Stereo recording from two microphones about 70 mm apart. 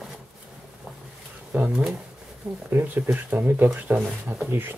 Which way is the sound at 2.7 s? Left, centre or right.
Right.